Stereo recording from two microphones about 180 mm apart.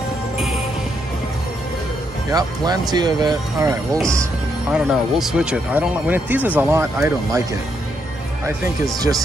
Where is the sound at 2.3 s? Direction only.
20° right (ahead or behind).